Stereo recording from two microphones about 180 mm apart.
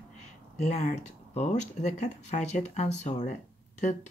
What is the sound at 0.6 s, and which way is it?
Speech, 40° left (ahead or behind).